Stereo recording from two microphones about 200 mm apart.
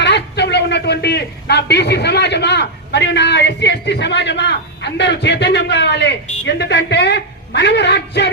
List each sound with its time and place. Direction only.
0.0 s a man's voice: 60° left (ahead or behind)